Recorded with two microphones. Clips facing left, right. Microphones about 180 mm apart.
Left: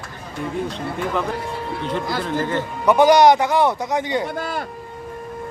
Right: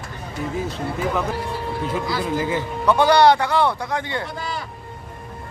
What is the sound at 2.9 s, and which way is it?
Speech, 15° left (ahead or behind).